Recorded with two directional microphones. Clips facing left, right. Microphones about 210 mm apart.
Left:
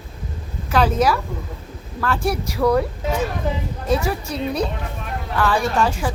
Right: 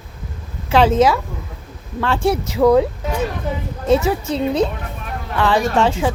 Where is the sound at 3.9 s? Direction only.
25° right (ahead or behind).